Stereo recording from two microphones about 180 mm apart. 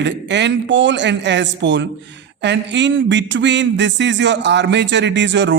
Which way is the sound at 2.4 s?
80° right.